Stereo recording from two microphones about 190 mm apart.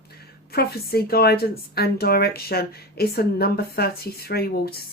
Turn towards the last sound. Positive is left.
turn(degrees=55)  # may be behind; listen again after turning